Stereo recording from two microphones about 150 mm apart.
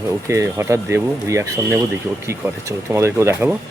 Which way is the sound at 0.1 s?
20° right (ahead or behind).